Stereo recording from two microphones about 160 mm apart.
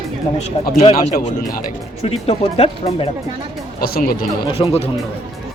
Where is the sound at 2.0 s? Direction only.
40° left (ahead or behind).